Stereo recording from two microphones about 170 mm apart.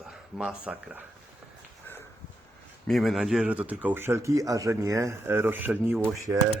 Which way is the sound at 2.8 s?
Centre (ahead or behind).